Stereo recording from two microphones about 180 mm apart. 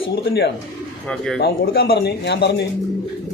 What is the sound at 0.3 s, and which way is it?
A man's voice, 65° left (ahead or behind).